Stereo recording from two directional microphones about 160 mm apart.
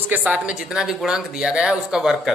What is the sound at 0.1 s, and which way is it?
Speech, 10° right (ahead or behind).